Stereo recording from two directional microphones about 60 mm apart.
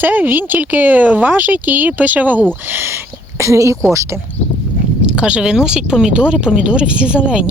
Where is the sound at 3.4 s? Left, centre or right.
Right.